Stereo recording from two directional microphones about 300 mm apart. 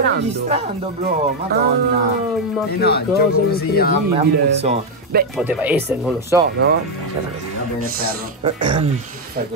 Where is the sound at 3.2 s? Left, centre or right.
Left.